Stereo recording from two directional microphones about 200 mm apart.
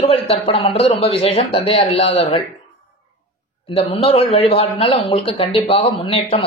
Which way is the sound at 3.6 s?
30° left (ahead or behind).